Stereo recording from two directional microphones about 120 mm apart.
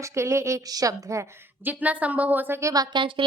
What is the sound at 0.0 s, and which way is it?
A woman's voice, 25° right (ahead or behind).